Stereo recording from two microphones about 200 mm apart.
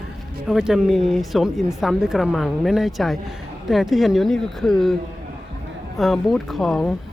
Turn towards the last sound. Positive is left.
turn(degrees=0)  # may be behind; listen again after turning